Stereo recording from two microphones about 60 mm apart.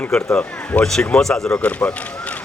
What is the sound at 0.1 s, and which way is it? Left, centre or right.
A man's voice, centre.